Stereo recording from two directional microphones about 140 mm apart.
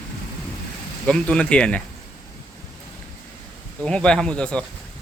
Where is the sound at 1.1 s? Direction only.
5° left (ahead or behind).